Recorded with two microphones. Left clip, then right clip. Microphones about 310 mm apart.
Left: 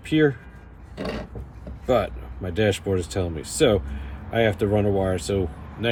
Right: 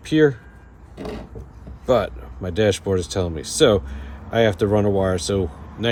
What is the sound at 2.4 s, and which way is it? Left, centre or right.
Speech, right.